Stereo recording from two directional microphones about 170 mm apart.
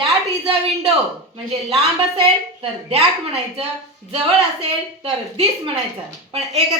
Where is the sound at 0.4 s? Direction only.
35° right (ahead or behind).